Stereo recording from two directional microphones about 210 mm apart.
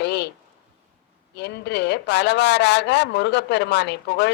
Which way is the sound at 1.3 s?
55° left (ahead or behind).